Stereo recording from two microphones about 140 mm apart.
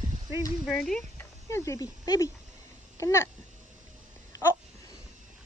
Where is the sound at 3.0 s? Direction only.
20° left (ahead or behind).